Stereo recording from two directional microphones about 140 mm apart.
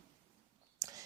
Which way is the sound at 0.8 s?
25° right (ahead or behind).